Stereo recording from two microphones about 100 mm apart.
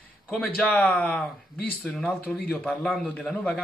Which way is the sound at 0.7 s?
10° left (ahead or behind).